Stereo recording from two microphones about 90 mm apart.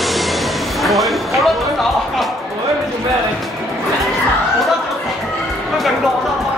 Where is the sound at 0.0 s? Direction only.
Centre (ahead or behind).